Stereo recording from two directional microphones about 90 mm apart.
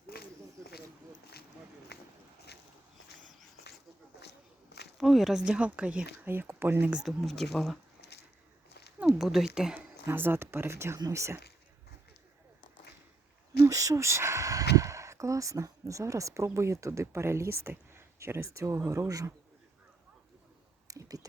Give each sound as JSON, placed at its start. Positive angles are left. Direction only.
{"t": 4.9, "sound": "speech", "side_deg": 0}
{"t": 6.9, "sound": "speech", "side_deg": -10}
{"t": 7.3, "sound": "speech", "side_deg": 5}
{"t": 9.1, "sound": "speech", "side_deg": -5}
{"t": 10.1, "sound": "speech", "side_deg": -25}
{"t": 13.7, "sound": "speech", "side_deg": -35}
{"t": 20.8, "sound": "a sound", "side_deg": -40}